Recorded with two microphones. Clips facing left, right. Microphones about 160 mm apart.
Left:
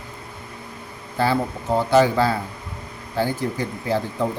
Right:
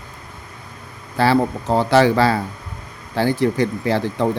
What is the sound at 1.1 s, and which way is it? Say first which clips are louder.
A man's voice: right 5 dB; 90° right.